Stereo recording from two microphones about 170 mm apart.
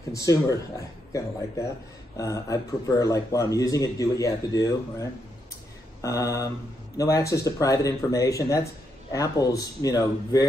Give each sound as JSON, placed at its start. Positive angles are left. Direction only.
{"t": 0.1, "sound": "speech", "side_deg": 20}
{"t": 5.9, "sound": "mantra", "side_deg": 20}
{"t": 7.0, "sound": "speech", "side_deg": 20}